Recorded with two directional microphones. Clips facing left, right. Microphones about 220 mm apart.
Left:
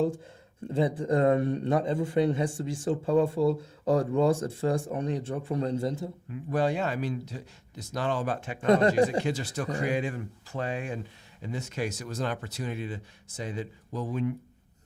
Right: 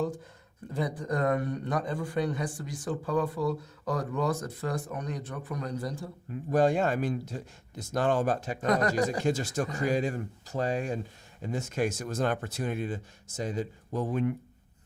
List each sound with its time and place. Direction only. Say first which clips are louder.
0.7 s a man's voice: left 5 dB; 25° left (ahead or behind)
6.3 s speech: right 3 dB; 45° right (ahead or behind)
8.6 s a man's voice: left 5 dB; 25° left (ahead or behind)
9.2 s speech: right 2 dB; 45° right (ahead or behind)